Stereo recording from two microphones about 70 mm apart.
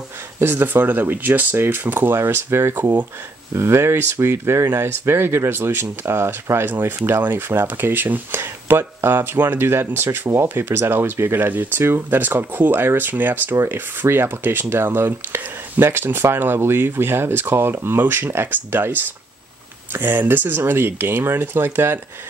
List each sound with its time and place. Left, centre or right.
0.4 s speech: right